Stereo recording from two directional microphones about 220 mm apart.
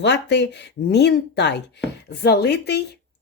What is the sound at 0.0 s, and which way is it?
Speech, 50° left (ahead or behind).